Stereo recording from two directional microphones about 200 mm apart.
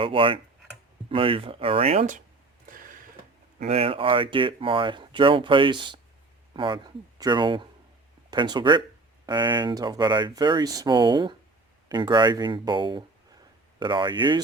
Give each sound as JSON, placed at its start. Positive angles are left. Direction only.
{"t": 0.0, "sound": "speech", "side_deg": -25}
{"t": 3.7, "sound": "speech", "side_deg": -30}